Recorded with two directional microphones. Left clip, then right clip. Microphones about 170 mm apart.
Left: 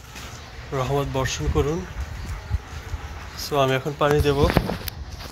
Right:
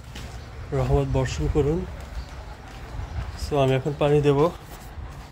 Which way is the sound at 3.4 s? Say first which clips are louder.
Left 1 dB; 15° right (ahead or behind).